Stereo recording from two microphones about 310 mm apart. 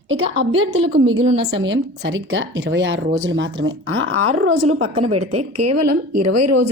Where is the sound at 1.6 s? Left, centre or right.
Right.